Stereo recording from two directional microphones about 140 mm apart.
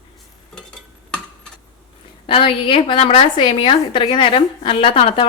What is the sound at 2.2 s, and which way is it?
A woman's voice, 40° left (ahead or behind).